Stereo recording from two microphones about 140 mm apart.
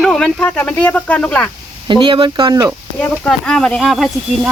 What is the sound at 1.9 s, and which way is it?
Speech, 35° right (ahead or behind).